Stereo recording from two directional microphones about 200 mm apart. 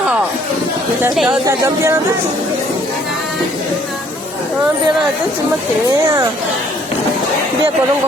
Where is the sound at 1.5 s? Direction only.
15° right (ahead or behind).